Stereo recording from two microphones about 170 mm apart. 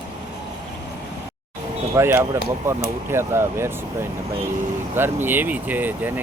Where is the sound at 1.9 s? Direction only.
15° right (ahead or behind).